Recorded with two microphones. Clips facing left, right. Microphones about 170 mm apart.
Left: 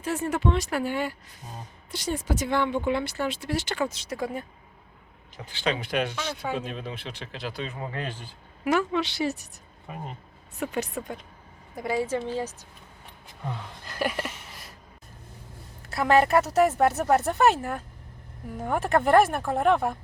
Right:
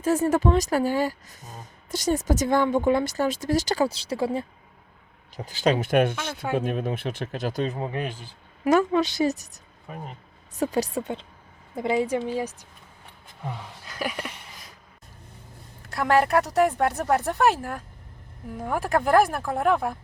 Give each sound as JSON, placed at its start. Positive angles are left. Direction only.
{"t": 0.0, "sound": "speech", "side_deg": -40}
{"t": 5.5, "sound": "speech", "side_deg": -40}
{"t": 7.8, "sound": "a woman's voice", "side_deg": -20}
{"t": 8.6, "sound": "speech", "side_deg": -40}
{"t": 10.6, "sound": "a woman's voice", "side_deg": -35}
{"t": 13.8, "sound": "a sound", "side_deg": 0}
{"t": 15.9, "sound": "speech", "side_deg": 0}